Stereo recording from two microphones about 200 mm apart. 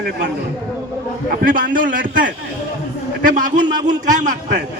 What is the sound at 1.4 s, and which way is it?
A man's voice, 45° right (ahead or behind).